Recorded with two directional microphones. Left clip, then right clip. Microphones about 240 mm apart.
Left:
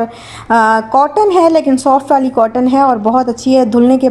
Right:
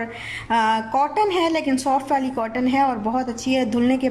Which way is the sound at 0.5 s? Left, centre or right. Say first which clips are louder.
Left 10 dB; centre.